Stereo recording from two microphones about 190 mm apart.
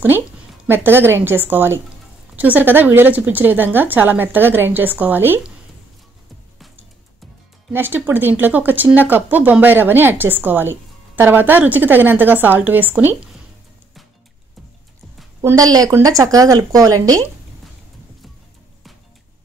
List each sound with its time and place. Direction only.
0.7 s speech: 10° right (ahead or behind)
7.7 s speech: 10° right (ahead or behind)
15.4 s speech: 20° right (ahead or behind)